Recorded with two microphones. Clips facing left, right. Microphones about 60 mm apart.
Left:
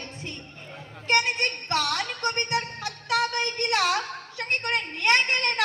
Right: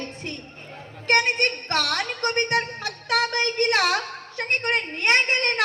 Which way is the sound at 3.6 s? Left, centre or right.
Right.